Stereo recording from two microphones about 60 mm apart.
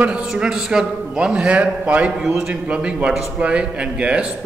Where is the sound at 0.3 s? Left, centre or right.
Centre.